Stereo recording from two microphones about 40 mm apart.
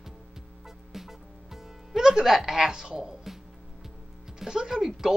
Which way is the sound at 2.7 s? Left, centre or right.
Centre.